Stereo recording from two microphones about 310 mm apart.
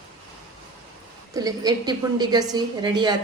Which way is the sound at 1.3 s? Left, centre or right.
Centre.